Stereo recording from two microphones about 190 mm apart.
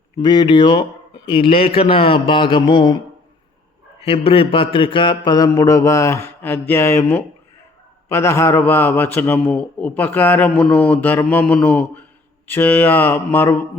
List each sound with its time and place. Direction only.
0.2 s mantra: 20° left (ahead or behind)
4.0 s mantra: 30° left (ahead or behind); by 7.2 s 15° left (ahead or behind)
8.1 s speech: 15° left (ahead or behind)